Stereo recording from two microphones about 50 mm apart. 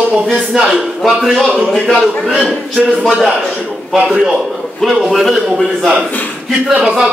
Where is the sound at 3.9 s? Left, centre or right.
Centre.